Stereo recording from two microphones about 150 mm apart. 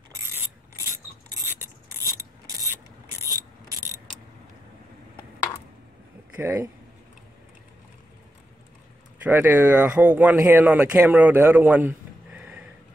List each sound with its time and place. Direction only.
0.1 s mechanisms: 20° right (ahead or behind)
1.5 s filing: 15° right (ahead or behind)
6.3 s a man's voice: 15° right (ahead or behind)
9.2 s a man's voice: 10° right (ahead or behind)